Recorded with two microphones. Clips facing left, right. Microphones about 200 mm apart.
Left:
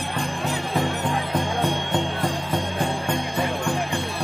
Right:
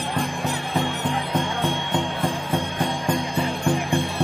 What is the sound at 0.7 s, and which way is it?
Honk, centre (ahead or behind).